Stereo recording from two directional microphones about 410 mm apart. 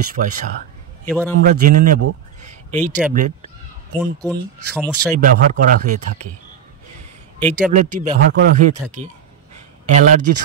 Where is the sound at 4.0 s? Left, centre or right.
Centre.